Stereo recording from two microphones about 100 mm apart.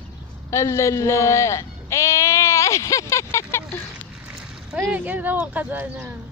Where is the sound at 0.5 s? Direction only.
30° left (ahead or behind).